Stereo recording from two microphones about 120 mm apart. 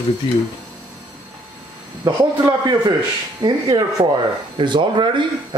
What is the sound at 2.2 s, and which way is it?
Speech, 35° right (ahead or behind).